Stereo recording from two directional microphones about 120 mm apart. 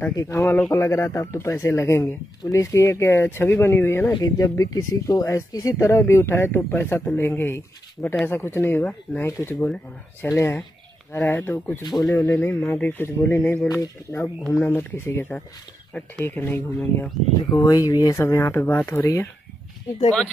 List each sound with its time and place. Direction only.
0.1 s speech: 25° left (ahead or behind)
11.8 s speech: 30° left (ahead or behind)
17.6 s speech: 30° left (ahead or behind)
18.1 s speech: 20° left (ahead or behind)